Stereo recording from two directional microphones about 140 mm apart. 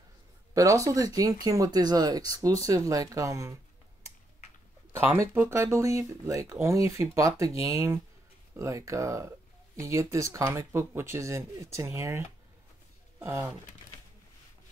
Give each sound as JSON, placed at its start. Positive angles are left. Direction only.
{"t": 0.6, "sound": "speech", "side_deg": -25}
{"t": 4.9, "sound": "speech", "side_deg": -15}
{"t": 13.2, "sound": "speech", "side_deg": -20}